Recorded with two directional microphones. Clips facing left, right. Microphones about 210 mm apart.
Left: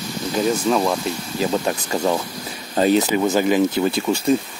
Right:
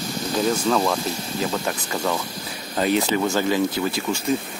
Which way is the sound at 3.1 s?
15° left (ahead or behind).